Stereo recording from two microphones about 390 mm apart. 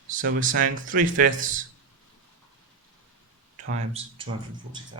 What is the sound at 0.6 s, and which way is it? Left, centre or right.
Speech, right.